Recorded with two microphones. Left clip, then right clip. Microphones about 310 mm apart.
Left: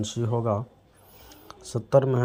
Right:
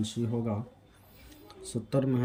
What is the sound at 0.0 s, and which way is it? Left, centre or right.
Speech, centre.